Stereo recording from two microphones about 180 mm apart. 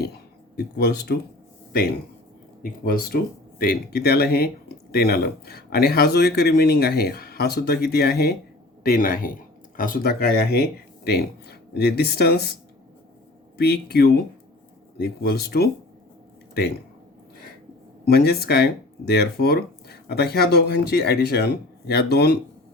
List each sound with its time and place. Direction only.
0.0 s a sound: 60° left (ahead or behind)
2.6 s speech: 55° left (ahead or behind)
13.6 s speech: 65° left (ahead or behind)
18.0 s speech: 60° left (ahead or behind)